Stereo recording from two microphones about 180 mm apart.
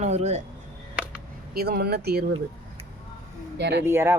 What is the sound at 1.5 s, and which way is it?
Speech, 60° right (ahead or behind).